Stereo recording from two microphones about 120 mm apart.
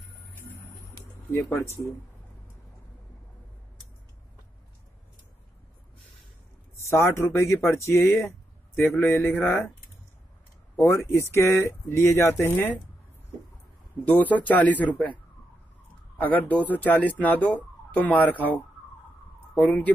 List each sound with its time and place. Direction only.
0.9 s speech: 25° left (ahead or behind)
6.9 s speech: 20° left (ahead or behind)
10.8 s speech: 20° left (ahead or behind)
14.0 s speech: 15° left (ahead or behind)
16.2 s speech: 15° left (ahead or behind)
19.6 s speech: 10° left (ahead or behind)